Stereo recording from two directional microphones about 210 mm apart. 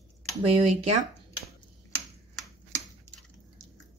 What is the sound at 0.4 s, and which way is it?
Speech, 30° right (ahead or behind).